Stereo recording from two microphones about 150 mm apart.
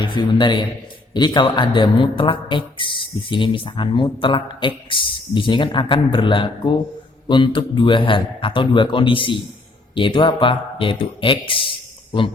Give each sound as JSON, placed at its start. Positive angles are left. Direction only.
{"t": 0.0, "sound": "speech", "side_deg": 30}